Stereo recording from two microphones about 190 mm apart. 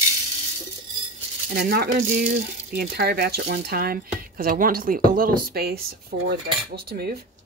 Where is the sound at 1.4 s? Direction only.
55° right (ahead or behind).